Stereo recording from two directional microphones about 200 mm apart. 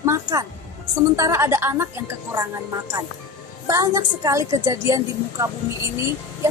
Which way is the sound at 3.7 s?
15° right (ahead or behind).